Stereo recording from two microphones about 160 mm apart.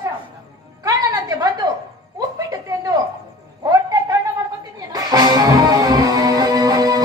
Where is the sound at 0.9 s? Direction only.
25° right (ahead or behind).